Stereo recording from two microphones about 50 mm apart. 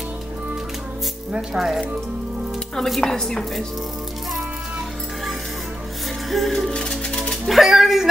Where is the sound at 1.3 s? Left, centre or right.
Centre.